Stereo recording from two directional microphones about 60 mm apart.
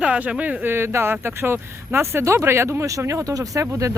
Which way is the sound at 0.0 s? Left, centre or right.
Centre.